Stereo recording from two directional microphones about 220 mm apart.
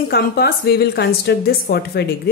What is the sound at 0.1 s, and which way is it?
A woman's voice, 45° left (ahead or behind).